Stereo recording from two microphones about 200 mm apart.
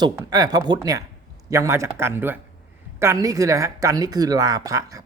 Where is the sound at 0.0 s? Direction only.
20° right (ahead or behind).